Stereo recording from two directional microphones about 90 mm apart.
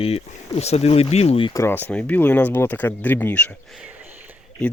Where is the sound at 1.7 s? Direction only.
20° left (ahead or behind).